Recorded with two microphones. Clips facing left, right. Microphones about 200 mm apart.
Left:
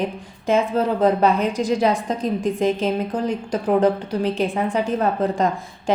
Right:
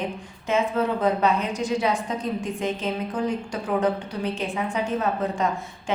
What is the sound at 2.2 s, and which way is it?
Speech, 90° left.